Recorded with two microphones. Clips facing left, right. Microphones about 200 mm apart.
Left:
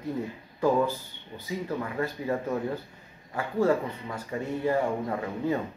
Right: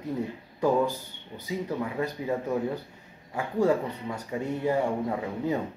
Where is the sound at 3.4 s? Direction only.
15° right (ahead or behind).